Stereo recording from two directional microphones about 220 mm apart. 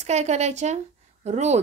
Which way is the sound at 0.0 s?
30° right (ahead or behind).